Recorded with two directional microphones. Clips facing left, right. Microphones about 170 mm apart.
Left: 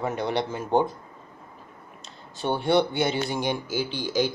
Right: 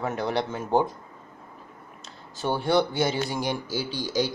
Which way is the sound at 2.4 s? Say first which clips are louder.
Left 1 dB; centre (ahead or behind).